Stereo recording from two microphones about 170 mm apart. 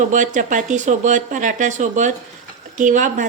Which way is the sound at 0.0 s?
50° right (ahead or behind).